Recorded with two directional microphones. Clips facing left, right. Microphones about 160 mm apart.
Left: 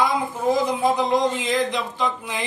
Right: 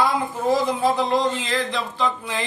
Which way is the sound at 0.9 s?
20° left (ahead or behind).